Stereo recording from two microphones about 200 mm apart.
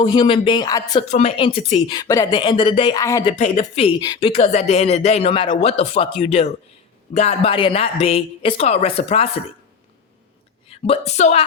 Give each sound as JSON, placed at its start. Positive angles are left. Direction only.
{"t": 0.0, "sound": "speech", "side_deg": 25}
{"t": 1.0, "sound": "speech", "side_deg": 35}
{"t": 3.0, "sound": "speech", "side_deg": 15}
{"t": 3.3, "sound": "speech", "side_deg": 35}
{"t": 4.0, "sound": "speech", "side_deg": 20}
{"t": 4.4, "sound": "speech", "side_deg": 35}
{"t": 10.7, "sound": "a woman's voice", "side_deg": 30}